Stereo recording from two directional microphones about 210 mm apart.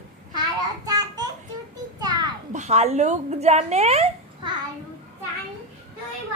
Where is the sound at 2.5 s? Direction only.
35° right (ahead or behind).